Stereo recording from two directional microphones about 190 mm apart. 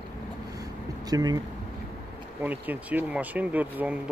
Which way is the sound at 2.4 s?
10° right (ahead or behind).